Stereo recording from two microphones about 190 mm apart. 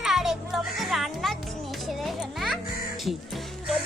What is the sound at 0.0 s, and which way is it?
Music, centre (ahead or behind).